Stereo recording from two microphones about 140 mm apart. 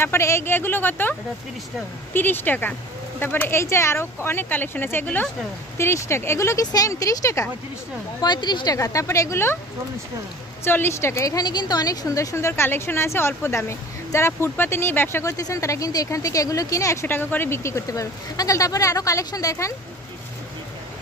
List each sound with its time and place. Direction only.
0.0 s speech: 20° left (ahead or behind)
2.1 s a woman's voice: 15° left (ahead or behind)
10.6 s a woman's voice: 15° left (ahead or behind)